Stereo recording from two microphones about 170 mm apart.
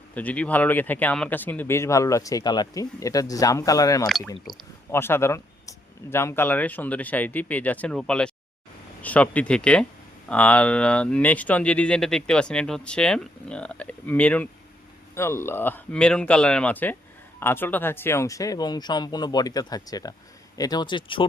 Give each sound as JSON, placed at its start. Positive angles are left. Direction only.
{"t": 0.1, "sound": "speech", "side_deg": 10}